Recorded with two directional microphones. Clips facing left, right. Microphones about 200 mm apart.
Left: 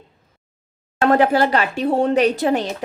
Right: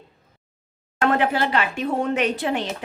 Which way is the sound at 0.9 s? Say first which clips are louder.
Left 5 dB; 40° left (ahead or behind).